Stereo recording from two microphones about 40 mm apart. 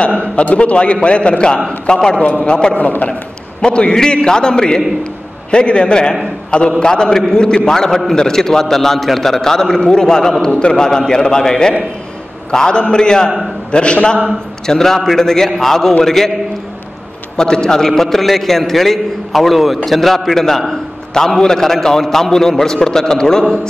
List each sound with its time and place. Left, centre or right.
0.2 s a man's voice: left
2.8 s a man's voice: left
3.6 s a man's voice: left
13.7 s a sound: left
14.7 s a man's voice: centre
17.4 s a man's voice: centre